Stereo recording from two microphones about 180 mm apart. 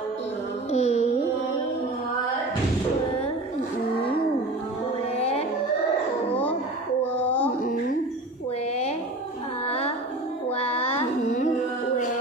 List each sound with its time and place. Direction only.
0.7 s music: 35° left (ahead or behind)
5.1 s music: 35° left (ahead or behind)
9.7 s music: 35° left (ahead or behind)
11.0 s carnatic music: 40° left (ahead or behind)